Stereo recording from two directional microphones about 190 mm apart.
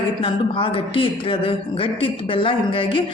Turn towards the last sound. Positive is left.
turn(degrees=30)  # may be behind; listen again after turning